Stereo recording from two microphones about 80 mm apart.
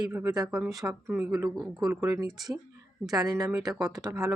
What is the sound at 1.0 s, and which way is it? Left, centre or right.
Speech, right.